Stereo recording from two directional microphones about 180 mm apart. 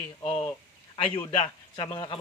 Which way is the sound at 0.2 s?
35° left (ahead or behind).